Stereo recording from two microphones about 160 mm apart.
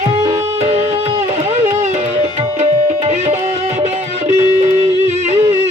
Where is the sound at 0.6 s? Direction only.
45° right (ahead or behind).